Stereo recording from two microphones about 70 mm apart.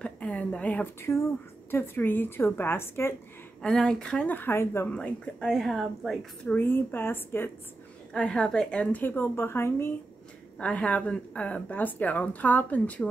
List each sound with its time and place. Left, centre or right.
0.0 s a sound: centre
1.1 s a woman's voice: left
3.6 s a woman's voice: centre
4.2 s a woman's voice: left
4.8 s a woman's voice: centre
5.4 s speech: centre
6.4 s a woman's voice: left
8.1 s a woman's voice: centre
8.9 s speech: left
10.6 s speech: centre